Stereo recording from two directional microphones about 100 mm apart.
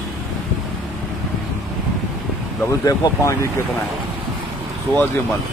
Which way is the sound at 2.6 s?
30° left (ahead or behind).